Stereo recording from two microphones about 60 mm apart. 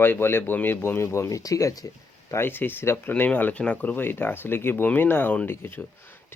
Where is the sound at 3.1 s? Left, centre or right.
Left.